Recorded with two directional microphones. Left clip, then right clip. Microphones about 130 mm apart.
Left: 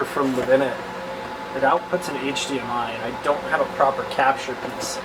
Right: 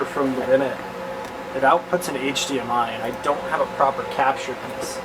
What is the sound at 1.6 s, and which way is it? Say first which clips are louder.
Speech: right 2 dB; 20° right (ahead or behind).